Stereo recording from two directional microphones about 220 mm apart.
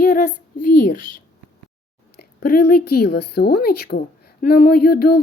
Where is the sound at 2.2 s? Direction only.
45° left (ahead or behind).